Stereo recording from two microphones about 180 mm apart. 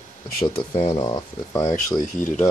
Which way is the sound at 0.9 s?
25° left (ahead or behind).